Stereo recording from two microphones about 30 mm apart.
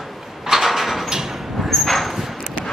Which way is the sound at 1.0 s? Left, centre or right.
Centre.